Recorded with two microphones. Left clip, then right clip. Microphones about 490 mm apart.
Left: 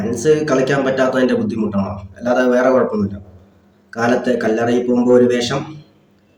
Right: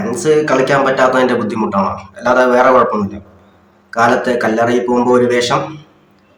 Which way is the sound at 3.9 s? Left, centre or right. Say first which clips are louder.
Right 4 dB; left.